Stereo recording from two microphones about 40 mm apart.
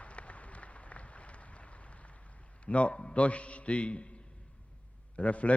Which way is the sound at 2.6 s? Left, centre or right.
Left.